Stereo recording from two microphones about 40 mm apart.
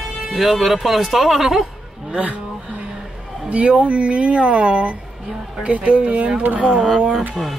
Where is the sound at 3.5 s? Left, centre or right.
Right.